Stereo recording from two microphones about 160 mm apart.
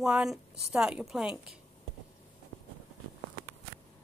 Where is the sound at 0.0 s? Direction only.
Centre (ahead or behind).